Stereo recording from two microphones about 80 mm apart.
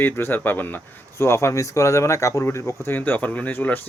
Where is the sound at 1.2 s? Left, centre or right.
Left.